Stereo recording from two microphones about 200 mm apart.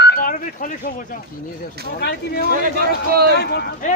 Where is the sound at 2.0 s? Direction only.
55° left (ahead or behind).